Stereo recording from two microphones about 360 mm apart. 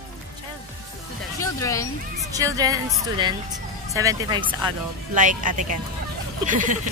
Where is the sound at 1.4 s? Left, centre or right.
Centre.